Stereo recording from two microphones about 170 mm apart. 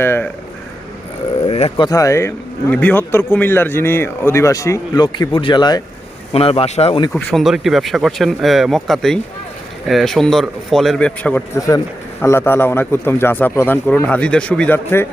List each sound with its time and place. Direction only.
0.0 s speech: 15° left (ahead or behind)
1.5 s a sound: 35° left (ahead or behind)
1.9 s a man's voice: 20° left (ahead or behind); by 7.0 s 35° left (ahead or behind)
7.1 s a man's voice: 5° left (ahead or behind)